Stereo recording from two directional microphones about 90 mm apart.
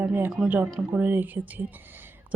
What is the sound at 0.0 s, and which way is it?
Speech, 20° right (ahead or behind).